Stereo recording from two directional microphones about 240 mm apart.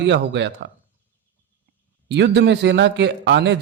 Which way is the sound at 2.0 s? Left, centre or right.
Right.